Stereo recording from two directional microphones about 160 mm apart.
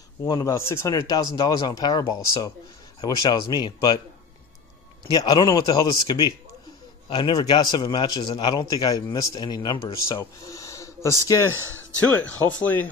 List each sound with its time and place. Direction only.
0.2 s a man's voice: 20° left (ahead or behind)
5.1 s a man's voice: 25° left (ahead or behind)
12.0 s speech: 10° left (ahead or behind)